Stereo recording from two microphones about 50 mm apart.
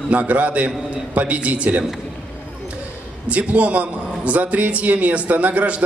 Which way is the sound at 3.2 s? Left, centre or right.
Right.